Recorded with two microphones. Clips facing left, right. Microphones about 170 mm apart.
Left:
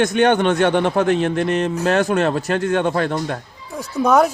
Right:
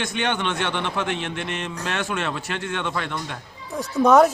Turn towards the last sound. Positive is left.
turn(degrees=0)  # may be behind; listen again after turning